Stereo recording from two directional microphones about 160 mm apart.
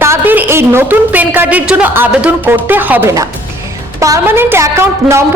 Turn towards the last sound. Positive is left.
turn(degrees=-15)  # may be behind; listen again after turning